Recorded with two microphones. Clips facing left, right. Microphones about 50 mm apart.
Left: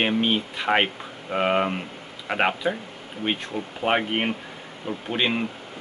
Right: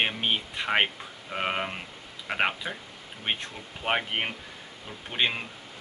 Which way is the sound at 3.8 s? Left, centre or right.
Centre.